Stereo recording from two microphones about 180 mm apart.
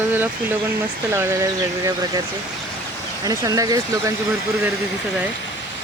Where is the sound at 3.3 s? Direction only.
20° right (ahead or behind).